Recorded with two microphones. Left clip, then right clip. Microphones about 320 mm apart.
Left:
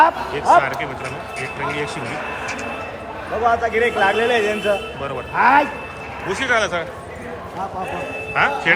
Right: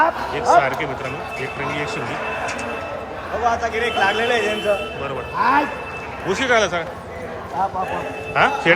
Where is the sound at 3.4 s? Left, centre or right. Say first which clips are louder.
Left 3 dB; left.